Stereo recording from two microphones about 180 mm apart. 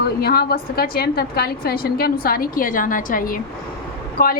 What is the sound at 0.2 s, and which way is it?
A woman's voice, 60° left (ahead or behind).